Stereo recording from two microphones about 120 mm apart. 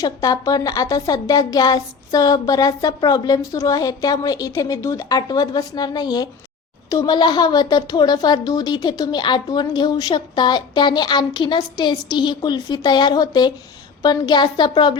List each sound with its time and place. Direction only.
0.0 s a woman's voice: 30° left (ahead or behind)